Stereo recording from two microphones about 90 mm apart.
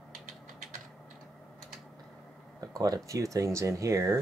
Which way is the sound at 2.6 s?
45° right (ahead or behind).